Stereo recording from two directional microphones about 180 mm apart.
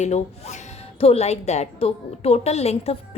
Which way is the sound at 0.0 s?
40° left (ahead or behind).